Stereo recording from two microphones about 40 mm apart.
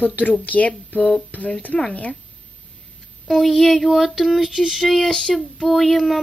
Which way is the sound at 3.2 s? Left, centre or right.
Centre.